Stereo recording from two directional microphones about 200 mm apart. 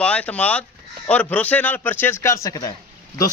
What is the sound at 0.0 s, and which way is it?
A man's voice, 5° left (ahead or behind).